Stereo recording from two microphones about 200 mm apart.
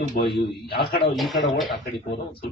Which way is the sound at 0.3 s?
50° left (ahead or behind).